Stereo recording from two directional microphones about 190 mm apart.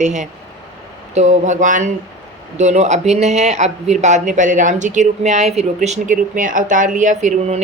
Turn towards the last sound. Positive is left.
turn(degrees=-35)  # may be behind; listen again after turning